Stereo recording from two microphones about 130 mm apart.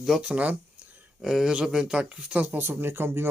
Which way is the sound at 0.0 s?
5° right (ahead or behind).